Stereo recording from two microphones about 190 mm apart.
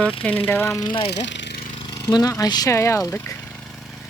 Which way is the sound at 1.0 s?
65° left (ahead or behind).